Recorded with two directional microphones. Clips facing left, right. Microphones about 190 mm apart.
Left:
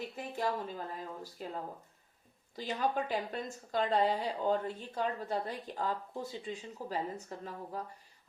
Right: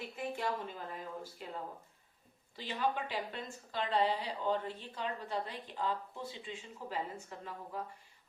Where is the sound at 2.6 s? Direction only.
40° left (ahead or behind).